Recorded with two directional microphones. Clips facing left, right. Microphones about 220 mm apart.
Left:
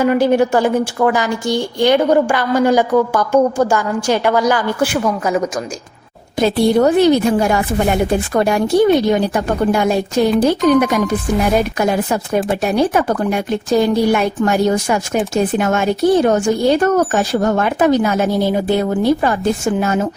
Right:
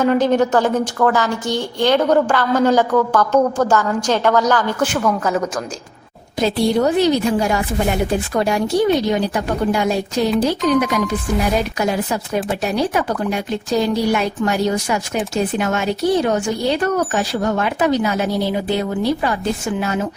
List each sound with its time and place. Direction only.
0.0 s a woman's voice: 10° left (ahead or behind)
6.4 s speech: 55° left (ahead or behind)